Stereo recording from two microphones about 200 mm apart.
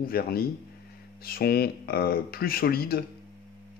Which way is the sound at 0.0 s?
50° left (ahead or behind).